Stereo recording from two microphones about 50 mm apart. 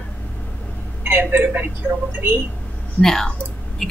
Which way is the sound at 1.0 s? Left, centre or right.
Right.